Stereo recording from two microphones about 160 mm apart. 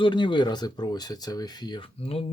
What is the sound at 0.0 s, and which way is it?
Speech, 30° left (ahead or behind).